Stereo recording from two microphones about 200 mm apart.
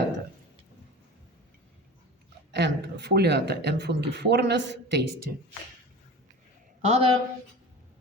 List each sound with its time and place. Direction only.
2.5 s speech: 60° right (ahead or behind)
6.8 s a woman's voice: 30° right (ahead or behind)